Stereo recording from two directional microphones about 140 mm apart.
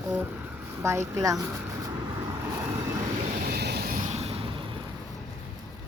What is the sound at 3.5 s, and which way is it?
Vehicle, 75° right (ahead or behind).